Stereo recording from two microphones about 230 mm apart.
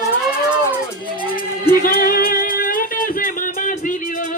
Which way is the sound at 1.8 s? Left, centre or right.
Left.